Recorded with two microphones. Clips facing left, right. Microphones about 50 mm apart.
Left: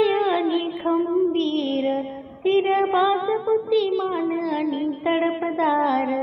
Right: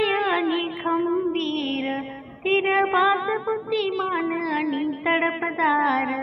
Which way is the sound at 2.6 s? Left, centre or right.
Right.